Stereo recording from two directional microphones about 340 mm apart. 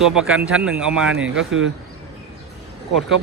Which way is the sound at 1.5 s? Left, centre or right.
Right.